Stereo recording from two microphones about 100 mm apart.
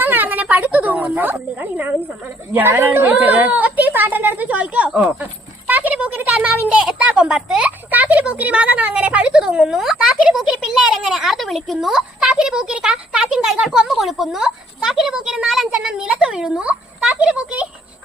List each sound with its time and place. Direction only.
0.0 s speech: 20° right (ahead or behind)
5.0 s a sound: 15° right (ahead or behind)
7.9 s speech: 15° right (ahead or behind)